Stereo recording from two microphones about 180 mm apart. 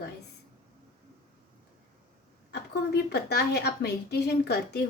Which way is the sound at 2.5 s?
65° left (ahead or behind).